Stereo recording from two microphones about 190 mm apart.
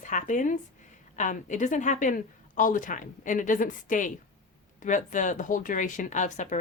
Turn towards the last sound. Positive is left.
turn(degrees=40)  # may be behind; listen again after turning